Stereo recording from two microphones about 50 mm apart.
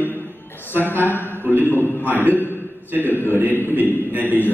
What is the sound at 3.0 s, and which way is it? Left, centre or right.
A man's voice, left.